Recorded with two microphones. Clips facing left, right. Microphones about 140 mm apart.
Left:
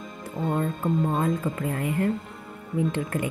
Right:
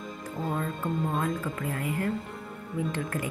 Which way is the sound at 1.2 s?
25° left (ahead or behind).